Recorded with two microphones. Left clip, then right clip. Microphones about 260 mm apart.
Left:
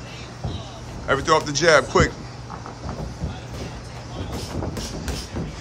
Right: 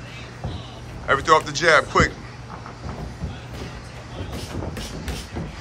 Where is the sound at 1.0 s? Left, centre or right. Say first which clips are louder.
Right 2 dB; centre.